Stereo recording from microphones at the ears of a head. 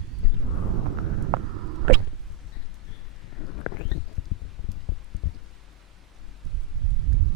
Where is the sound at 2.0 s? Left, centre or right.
Left.